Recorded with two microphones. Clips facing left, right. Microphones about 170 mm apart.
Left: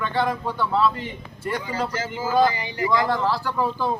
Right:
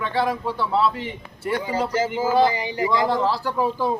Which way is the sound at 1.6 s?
20° right (ahead or behind).